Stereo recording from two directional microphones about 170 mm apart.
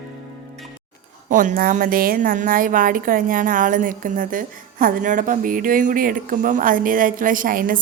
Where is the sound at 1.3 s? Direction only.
50° right (ahead or behind).